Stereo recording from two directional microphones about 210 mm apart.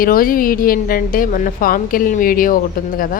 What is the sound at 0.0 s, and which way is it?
A woman's voice, 45° left (ahead or behind).